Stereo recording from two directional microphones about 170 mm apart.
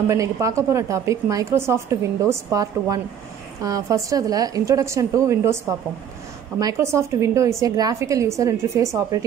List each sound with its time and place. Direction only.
0.1 s a woman's voice: 20° right (ahead or behind)